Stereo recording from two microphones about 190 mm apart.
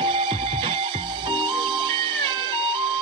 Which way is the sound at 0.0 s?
25° right (ahead or behind).